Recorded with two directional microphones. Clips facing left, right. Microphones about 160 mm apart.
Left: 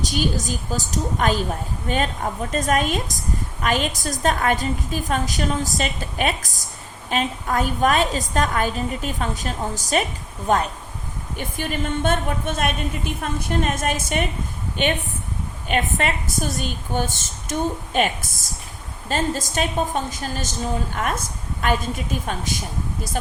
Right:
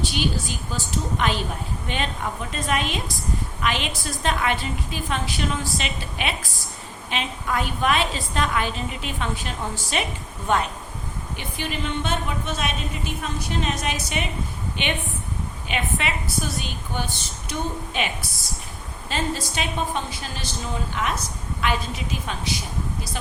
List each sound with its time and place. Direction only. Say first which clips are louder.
0.0 s a woman's voice: left 2 dB; 40° left (ahead or behind)